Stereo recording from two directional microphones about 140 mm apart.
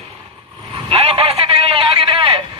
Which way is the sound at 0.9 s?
45° right (ahead or behind).